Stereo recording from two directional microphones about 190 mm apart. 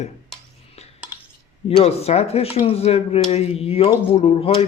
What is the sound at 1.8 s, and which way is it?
Speech, 35° left (ahead or behind).